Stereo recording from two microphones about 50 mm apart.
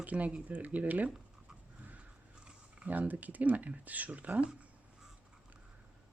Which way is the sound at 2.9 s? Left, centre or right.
Right.